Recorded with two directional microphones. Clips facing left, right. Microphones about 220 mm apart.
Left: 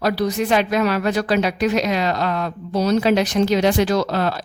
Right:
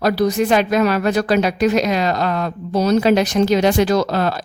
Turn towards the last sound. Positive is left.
turn(degrees=-45)  # may be behind; listen again after turning